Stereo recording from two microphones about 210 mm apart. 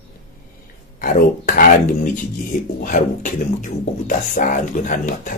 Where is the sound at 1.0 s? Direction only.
40° left (ahead or behind).